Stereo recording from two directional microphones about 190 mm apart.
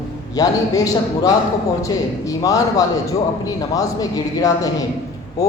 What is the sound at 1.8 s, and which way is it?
A man's voice, 15° left (ahead or behind).